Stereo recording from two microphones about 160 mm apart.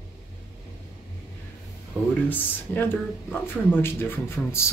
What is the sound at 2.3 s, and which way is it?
Speech, 10° left (ahead or behind).